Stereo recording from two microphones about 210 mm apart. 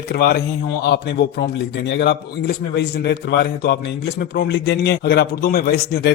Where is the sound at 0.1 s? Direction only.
50° left (ahead or behind).